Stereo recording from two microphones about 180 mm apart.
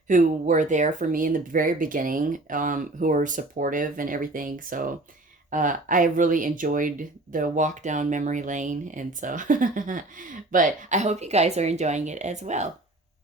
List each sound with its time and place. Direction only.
0.1 s speech: 45° right (ahead or behind)